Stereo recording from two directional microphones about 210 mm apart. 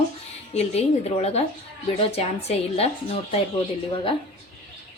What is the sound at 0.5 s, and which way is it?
A woman's voice, 30° left (ahead or behind).